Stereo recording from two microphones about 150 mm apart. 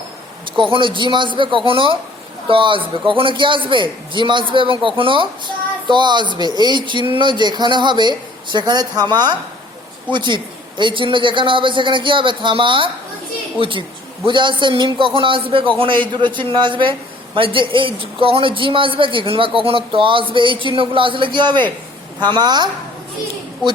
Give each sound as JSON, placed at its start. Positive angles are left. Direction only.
{"t": 0.5, "sound": "a man's voice", "side_deg": -35}